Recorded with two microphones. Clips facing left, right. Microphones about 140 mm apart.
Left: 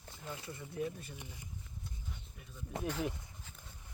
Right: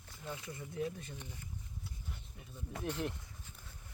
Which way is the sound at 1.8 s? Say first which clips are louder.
Left 3 dB; 5° right (ahead or behind).